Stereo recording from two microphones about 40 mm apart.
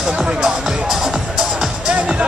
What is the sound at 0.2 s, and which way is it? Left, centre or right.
Music, centre.